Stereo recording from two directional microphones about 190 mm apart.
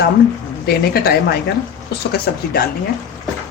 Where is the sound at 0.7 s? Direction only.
55° left (ahead or behind).